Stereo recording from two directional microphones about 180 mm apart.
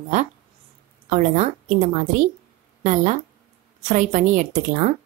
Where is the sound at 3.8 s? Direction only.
45° right (ahead or behind).